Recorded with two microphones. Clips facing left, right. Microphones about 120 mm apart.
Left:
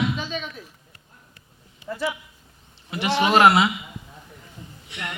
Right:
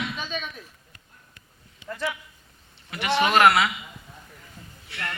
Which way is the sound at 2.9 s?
30° left (ahead or behind).